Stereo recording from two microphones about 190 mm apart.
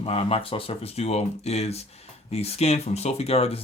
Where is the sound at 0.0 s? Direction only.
30° left (ahead or behind).